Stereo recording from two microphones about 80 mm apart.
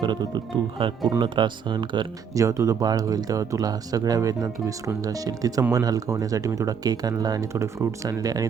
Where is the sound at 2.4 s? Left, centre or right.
Right.